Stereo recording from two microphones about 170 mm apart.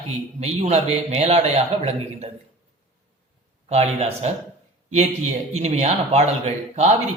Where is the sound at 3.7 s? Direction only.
40° right (ahead or behind).